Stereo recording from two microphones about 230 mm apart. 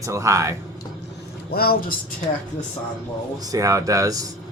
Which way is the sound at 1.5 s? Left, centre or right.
Left.